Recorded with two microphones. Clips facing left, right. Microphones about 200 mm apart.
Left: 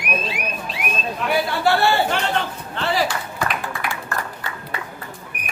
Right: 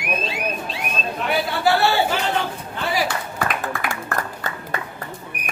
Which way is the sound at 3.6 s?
50° right (ahead or behind).